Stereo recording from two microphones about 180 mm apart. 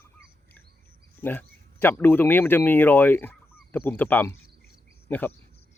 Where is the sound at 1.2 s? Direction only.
10° left (ahead or behind).